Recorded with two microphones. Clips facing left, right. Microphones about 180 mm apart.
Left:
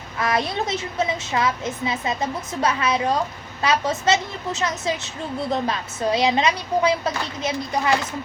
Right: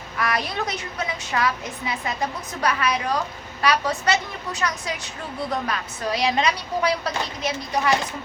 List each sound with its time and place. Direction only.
0.2 s a woman's voice: 25° left (ahead or behind)